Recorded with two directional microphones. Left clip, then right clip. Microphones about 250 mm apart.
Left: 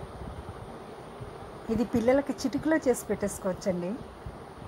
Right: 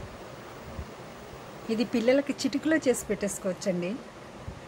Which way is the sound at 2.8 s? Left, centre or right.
Centre.